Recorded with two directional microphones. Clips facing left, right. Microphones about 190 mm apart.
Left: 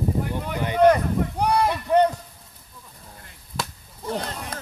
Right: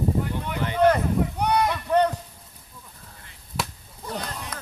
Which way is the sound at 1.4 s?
30° left (ahead or behind).